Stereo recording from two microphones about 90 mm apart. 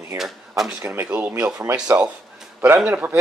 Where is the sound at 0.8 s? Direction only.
25° right (ahead or behind).